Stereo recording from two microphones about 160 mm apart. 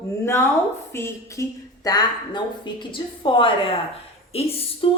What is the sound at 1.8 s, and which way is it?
A woman's voice, 25° left (ahead or behind).